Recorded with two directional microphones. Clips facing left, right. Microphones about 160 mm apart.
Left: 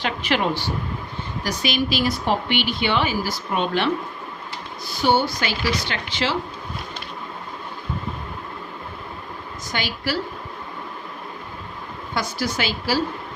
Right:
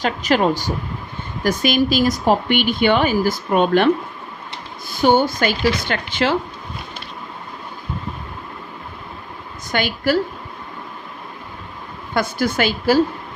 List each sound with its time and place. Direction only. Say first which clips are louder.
0.0 s a woman's voice: right 5 dB; 40° right (ahead or behind)
4.9 s a woman's voice: right 5 dB; 50° right (ahead or behind)
9.7 s a woman's voice: right 8 dB; 50° right (ahead or behind)
12.1 s a woman's voice: right 6 dB; 55° right (ahead or behind)